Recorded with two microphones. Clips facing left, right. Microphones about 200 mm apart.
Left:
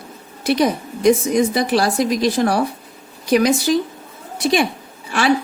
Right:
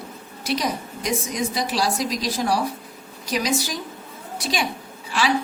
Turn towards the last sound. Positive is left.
turn(degrees=55)  # may be behind; listen again after turning